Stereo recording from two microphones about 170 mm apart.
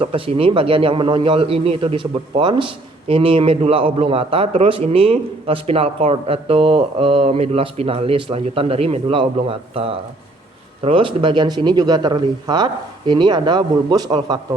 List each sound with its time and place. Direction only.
0.0 s a man's voice: 35° right (ahead or behind)